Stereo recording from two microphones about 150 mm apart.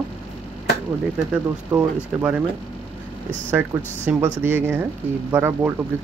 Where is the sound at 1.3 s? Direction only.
10° right (ahead or behind).